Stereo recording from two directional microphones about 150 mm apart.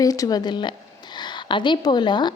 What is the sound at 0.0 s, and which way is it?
A woman's voice, 25° left (ahead or behind).